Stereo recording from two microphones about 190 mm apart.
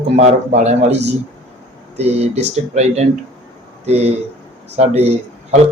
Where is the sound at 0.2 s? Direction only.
35° right (ahead or behind).